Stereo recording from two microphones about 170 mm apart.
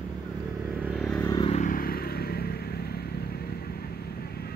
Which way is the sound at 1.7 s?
60° left (ahead or behind).